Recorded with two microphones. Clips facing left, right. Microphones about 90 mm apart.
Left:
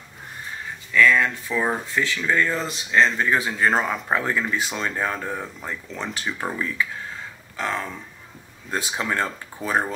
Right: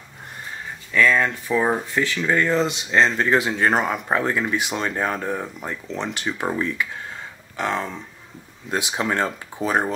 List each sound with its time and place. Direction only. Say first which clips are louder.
0.9 s speech: even; 20° right (ahead or behind)
2.9 s speech: left 1 dB; 30° right (ahead or behind)
3.4 s speech: right 1 dB; 20° right (ahead or behind)